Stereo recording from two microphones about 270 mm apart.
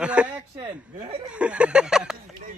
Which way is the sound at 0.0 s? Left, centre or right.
Centre.